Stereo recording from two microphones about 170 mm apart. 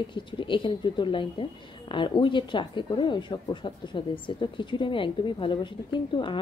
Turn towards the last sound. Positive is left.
turn(degrees=30)  # may be behind; listen again after turning